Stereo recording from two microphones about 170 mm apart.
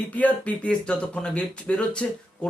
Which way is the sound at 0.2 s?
10° left (ahead or behind).